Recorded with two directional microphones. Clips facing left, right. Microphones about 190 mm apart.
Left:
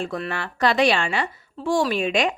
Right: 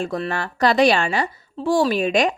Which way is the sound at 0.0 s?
40° right (ahead or behind).